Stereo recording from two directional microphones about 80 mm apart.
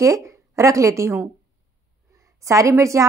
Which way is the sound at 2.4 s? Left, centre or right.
Right.